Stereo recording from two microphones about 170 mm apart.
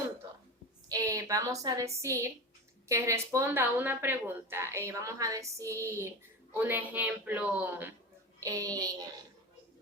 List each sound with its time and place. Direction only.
0.9 s a woman's voice: 20° right (ahead or behind)
8.4 s child singing: 20° right (ahead or behind)